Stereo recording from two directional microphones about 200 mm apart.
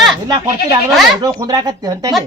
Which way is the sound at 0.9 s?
Centre (ahead or behind).